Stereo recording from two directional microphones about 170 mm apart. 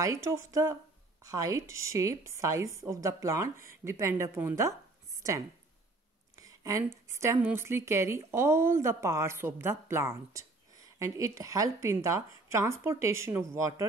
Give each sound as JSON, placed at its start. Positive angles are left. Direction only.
{"t": 0.0, "sound": "a woman's voice", "side_deg": -15}